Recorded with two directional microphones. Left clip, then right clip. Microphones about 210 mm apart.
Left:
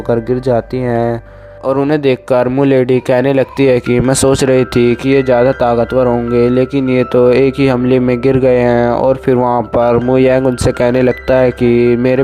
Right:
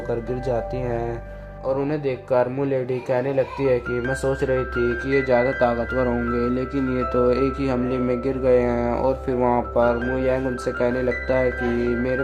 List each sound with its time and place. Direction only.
0.1 s a man's voice: 35° left (ahead or behind)